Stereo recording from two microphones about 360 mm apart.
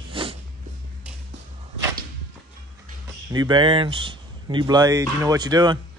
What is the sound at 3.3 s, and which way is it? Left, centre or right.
Speech, centre.